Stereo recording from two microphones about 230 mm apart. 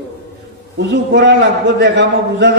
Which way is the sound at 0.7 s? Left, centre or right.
Right.